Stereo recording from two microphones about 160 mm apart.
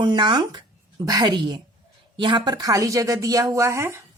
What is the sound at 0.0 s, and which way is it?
A woman's voice, 30° right (ahead or behind).